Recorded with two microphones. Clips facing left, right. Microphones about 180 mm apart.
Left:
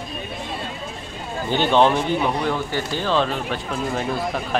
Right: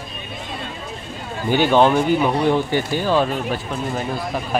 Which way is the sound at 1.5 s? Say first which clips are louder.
Right 2 dB; 10° right (ahead or behind).